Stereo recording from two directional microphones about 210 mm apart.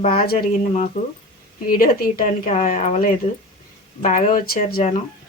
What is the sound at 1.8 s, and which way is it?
Speech, 45° left (ahead or behind).